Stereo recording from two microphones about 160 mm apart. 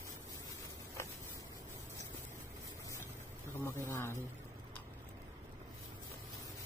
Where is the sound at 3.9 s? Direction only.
15° left (ahead or behind).